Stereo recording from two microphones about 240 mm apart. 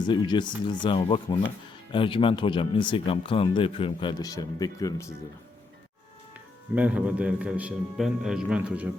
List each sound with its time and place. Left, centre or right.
0.0 s speech: centre
6.7 s a man's voice: centre